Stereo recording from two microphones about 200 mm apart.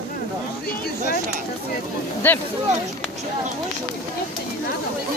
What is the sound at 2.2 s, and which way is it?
Speech, 10° left (ahead or behind).